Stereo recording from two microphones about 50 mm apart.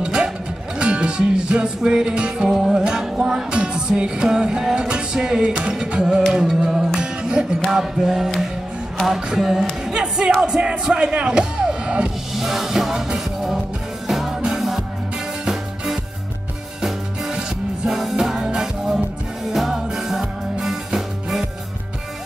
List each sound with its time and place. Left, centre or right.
0.0 s music: centre
6.3 s music: centre
9.9 s music: centre
10.4 s speech: centre
12.4 s music: centre